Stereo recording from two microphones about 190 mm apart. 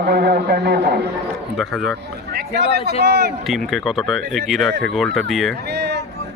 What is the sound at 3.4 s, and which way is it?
Speech, centre (ahead or behind).